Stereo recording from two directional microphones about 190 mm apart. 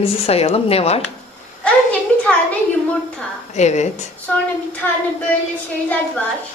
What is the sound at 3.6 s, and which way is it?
Speech, 35° left (ahead or behind).